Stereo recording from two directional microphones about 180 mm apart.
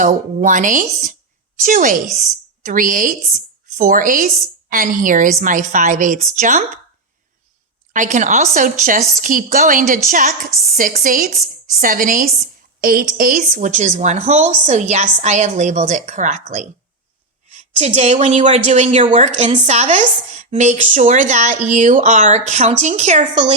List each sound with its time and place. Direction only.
0.0 s a woman's voice: 45° right (ahead or behind)
7.9 s a woman's voice: 45° right (ahead or behind)